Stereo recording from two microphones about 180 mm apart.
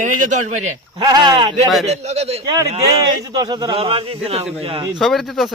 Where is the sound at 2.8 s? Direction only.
20° right (ahead or behind).